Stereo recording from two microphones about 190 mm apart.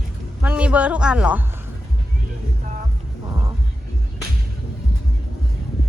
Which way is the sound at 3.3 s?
20° right (ahead or behind).